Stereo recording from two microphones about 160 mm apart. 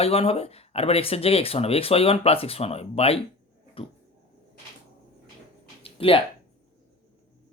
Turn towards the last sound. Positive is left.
turn(degrees=35)  # may be behind; listen again after turning